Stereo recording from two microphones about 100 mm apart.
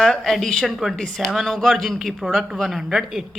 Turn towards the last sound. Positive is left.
turn(degrees=-5)  # may be behind; listen again after turning